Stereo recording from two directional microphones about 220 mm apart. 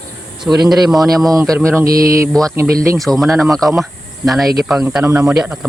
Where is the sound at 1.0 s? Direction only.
15° right (ahead or behind).